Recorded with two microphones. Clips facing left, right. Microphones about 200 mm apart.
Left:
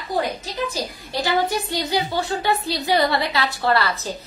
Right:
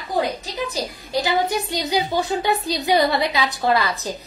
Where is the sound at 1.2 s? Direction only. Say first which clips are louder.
Left 1 dB; 20° right (ahead or behind).